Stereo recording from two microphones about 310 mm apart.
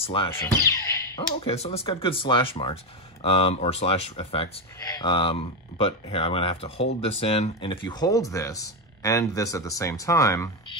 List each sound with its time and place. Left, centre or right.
0.0 s speech: centre